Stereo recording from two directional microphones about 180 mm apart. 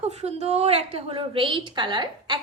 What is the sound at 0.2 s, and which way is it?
A woman's voice, 35° right (ahead or behind).